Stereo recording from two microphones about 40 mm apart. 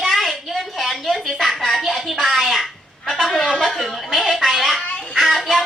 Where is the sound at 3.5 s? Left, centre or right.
Centre.